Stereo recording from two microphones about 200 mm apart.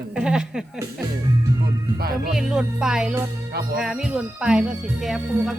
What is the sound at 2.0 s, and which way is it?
Speech, 50° right (ahead or behind).